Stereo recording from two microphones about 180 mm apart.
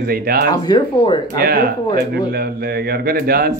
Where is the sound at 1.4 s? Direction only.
55° right (ahead or behind).